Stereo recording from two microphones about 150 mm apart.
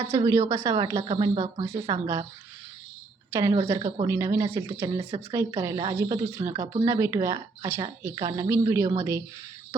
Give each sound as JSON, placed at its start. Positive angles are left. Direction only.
{"t": 0.2, "sound": "a woman's voice", "side_deg": -20}
{"t": 1.9, "sound": "a woman's voice", "side_deg": -20}
{"t": 3.3, "sound": "a woman's voice", "side_deg": -25}